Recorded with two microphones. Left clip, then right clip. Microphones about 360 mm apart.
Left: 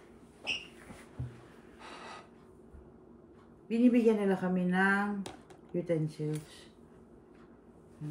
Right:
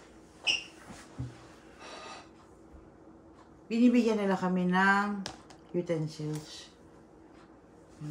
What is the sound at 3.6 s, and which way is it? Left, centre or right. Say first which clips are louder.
Speech: even; centre.